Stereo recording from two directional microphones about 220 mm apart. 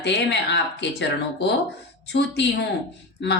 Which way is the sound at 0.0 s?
50° left (ahead or behind).